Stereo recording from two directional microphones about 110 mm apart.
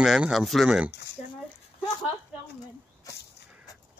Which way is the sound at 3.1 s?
30° left (ahead or behind).